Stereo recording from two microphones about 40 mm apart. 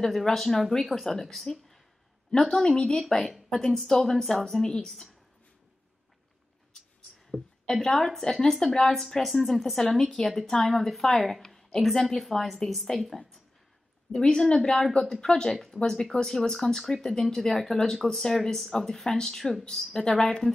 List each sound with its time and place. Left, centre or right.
0.0 s a woman's voice: centre
7.6 s speech: centre
8.9 s speech: centre
11.4 s a sound: centre
11.9 s speech: centre
14.1 s speech: centre